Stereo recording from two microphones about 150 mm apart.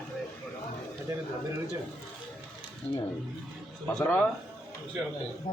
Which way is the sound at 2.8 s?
45° left (ahead or behind).